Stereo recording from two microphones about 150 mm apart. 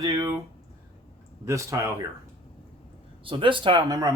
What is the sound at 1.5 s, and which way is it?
Speech, 20° right (ahead or behind).